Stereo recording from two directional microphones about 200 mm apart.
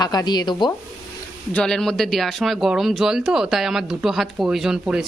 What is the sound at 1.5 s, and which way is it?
Speech, 5° left (ahead or behind).